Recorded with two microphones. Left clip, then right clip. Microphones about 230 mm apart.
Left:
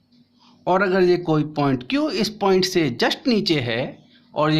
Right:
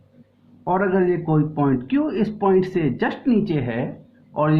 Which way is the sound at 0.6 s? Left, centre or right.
Left.